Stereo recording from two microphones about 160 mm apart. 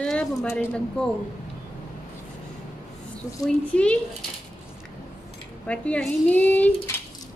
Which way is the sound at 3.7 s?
5° left (ahead or behind).